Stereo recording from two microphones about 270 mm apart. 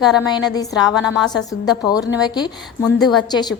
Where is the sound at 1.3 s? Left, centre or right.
Centre.